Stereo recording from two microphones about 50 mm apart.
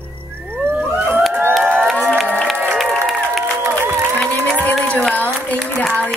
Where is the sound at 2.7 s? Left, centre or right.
Centre.